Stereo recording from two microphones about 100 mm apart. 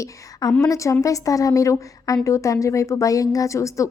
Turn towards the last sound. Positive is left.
turn(degrees=30)  # may be behind; listen again after turning